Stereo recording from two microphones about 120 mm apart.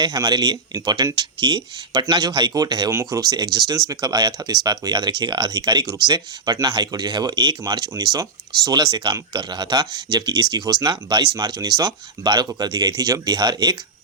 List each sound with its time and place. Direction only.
0.0 s speech: 35° right (ahead or behind)